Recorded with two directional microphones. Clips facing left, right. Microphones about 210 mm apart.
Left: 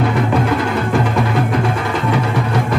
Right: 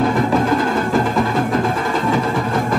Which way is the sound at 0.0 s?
45° right (ahead or behind).